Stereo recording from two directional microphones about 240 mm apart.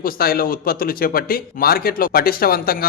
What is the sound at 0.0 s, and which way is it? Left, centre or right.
Speech, left.